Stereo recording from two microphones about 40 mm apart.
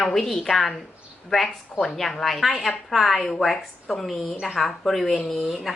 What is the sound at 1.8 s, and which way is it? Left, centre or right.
A woman's voice, centre.